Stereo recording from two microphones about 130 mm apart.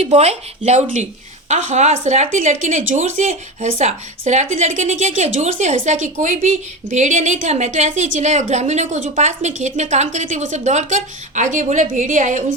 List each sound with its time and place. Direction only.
0.0 s a woman's voice: 55° right (ahead or behind); by 12.5 s 75° right (ahead or behind)